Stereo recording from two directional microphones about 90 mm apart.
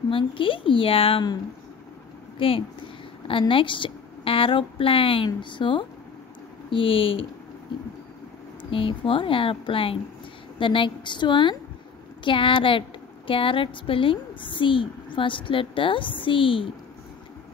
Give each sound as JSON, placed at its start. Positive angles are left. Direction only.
{"t": 0.1, "sound": "a woman's voice", "side_deg": 75}
{"t": 2.3, "sound": "speech", "side_deg": 90}
{"t": 3.3, "sound": "a woman's voice", "side_deg": 75}
{"t": 6.7, "sound": "a woman's voice", "side_deg": 75}
{"t": 8.6, "sound": "a woman's voice", "side_deg": 80}
{"t": 10.6, "sound": "a woman's voice", "side_deg": 70}